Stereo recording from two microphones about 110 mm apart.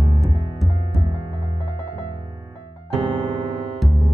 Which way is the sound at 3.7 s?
Centre (ahead or behind).